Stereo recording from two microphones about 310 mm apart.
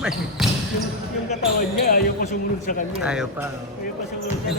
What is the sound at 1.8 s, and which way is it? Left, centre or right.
Speech, left.